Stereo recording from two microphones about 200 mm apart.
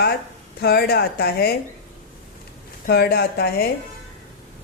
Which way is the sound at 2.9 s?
50° left (ahead or behind).